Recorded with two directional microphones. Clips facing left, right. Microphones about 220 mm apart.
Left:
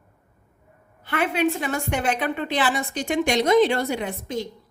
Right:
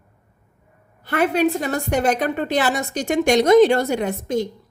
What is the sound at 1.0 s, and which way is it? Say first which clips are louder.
A woman's voice: right 4 dB; 40° right (ahead or behind).